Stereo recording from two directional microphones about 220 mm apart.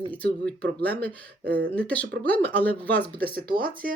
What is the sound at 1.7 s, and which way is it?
Speech, 5° left (ahead or behind).